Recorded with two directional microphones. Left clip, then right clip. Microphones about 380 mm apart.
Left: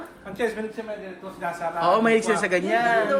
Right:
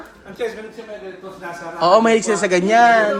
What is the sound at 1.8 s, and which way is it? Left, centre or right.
Speech, centre.